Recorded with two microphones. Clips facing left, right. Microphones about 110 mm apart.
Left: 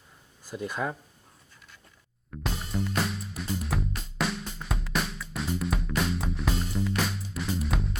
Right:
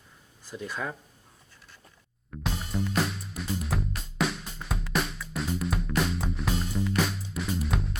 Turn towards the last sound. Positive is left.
turn(degrees=0)  # may be behind; listen again after turning